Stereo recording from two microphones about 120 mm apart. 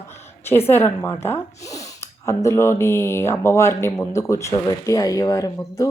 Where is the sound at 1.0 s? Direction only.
20° left (ahead or behind).